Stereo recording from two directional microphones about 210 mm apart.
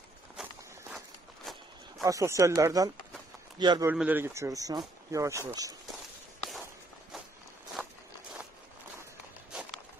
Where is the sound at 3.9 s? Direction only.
5° right (ahead or behind).